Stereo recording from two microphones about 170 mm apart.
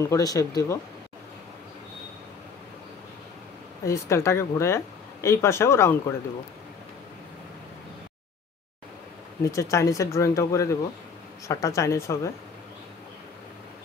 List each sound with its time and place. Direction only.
0.0 s speech: 20° left (ahead or behind)
3.8 s speech: 15° left (ahead or behind)
9.4 s speech: 20° left (ahead or behind)